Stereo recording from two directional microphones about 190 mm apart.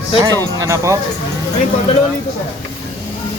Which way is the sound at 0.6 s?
15° right (ahead or behind).